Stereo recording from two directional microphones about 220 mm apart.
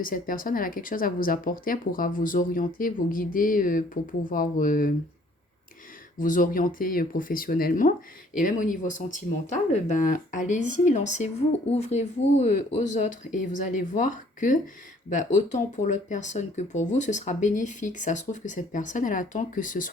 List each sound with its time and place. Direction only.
0.0 s speech: 40° left (ahead or behind)
6.1 s speech: 35° left (ahead or behind)